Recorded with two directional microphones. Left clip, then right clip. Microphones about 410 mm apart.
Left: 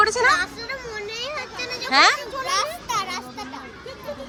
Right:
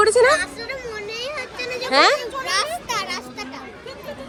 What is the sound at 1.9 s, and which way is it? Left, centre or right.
Children playing, centre.